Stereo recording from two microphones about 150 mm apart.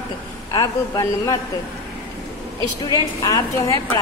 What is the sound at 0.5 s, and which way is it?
Speech, 25° left (ahead or behind).